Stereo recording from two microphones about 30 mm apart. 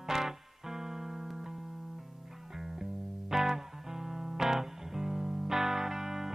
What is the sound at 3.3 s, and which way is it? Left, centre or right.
Music, centre.